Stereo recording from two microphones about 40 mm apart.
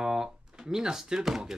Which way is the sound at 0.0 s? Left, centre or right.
Centre.